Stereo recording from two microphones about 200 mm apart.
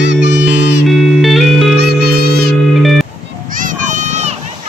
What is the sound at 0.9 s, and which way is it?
Music, centre (ahead or behind).